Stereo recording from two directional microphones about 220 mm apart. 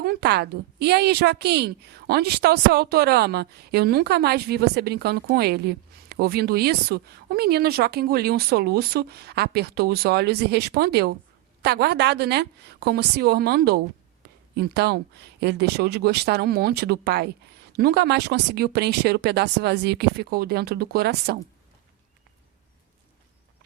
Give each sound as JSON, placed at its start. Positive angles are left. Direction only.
{"t": 0.0, "sound": "a woman's voice", "side_deg": -45}